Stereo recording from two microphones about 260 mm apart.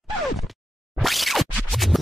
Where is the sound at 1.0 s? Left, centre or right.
Centre.